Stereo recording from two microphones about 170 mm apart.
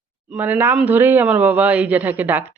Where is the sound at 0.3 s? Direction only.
10° right (ahead or behind).